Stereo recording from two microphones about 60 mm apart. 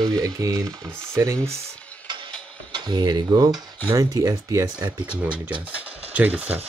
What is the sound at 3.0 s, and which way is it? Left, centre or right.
Speech, right.